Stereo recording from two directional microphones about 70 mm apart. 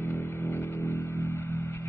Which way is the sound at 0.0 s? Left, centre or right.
Left.